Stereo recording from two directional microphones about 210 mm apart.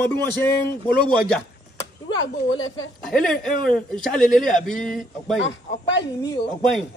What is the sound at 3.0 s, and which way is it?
Speech, centre (ahead or behind).